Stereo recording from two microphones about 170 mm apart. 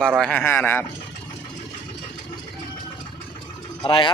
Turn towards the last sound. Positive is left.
turn(degrees=30)  # may be behind; listen again after turning